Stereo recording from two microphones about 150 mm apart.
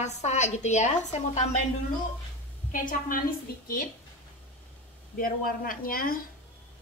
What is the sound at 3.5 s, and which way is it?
Female singing, 90° left.